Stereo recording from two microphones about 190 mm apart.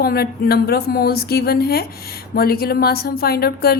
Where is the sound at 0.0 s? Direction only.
55° left (ahead or behind).